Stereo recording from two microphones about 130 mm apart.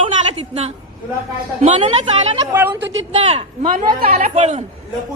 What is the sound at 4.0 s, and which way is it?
Speech, 70° right (ahead or behind).